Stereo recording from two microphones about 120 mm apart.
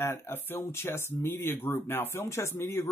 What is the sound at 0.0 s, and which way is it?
Speech, 20° left (ahead or behind).